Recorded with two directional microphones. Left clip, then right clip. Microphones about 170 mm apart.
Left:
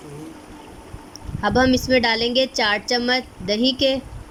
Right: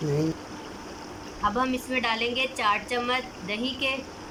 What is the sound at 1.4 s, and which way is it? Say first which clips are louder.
A woman's voice: left 8 dB; 60° left (ahead or behind).